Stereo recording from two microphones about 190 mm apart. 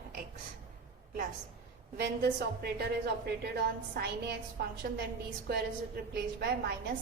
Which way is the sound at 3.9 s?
55° right (ahead or behind).